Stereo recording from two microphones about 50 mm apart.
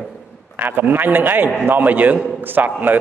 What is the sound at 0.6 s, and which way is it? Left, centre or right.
A man's voice, right.